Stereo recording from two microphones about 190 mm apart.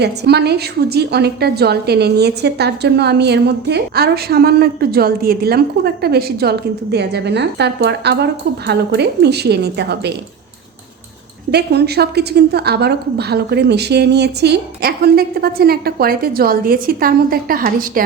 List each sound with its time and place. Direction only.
0.0 s a woman's voice: 60° right (ahead or behind)
11.5 s a woman's voice: 60° right (ahead or behind)